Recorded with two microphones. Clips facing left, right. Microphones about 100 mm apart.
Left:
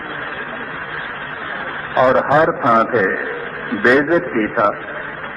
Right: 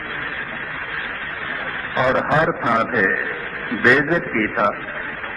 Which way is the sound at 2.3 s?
25° left (ahead or behind).